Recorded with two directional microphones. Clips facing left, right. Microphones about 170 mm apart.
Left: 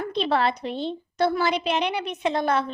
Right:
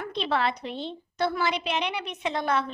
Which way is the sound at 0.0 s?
35° left (ahead or behind).